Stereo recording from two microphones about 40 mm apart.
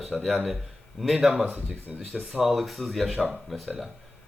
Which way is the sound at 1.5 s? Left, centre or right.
Right.